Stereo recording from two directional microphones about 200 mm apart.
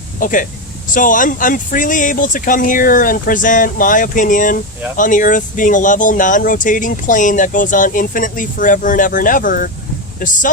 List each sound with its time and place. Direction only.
0.2 s speech: 40° left (ahead or behind)